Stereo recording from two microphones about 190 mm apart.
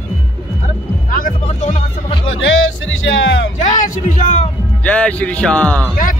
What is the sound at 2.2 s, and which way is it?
Music, 90° left.